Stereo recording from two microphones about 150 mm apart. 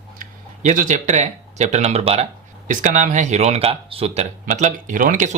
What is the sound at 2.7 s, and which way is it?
Speech, 55° right (ahead or behind).